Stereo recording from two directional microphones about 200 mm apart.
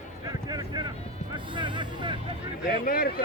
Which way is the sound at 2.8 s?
50° left (ahead or behind).